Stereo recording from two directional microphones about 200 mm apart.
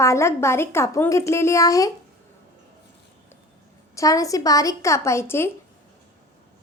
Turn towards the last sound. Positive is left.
turn(degrees=10)  # may be behind; listen again after turning